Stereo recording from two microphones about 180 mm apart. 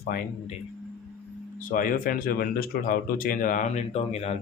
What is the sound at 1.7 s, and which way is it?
Speech, 50° left (ahead or behind).